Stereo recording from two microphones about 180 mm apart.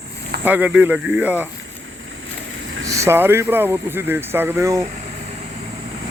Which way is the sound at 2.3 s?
90° right.